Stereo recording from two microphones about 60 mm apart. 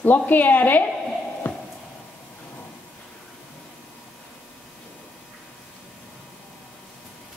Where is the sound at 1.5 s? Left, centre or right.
Left.